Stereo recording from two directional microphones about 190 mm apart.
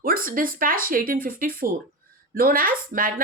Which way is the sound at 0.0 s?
50° right (ahead or behind).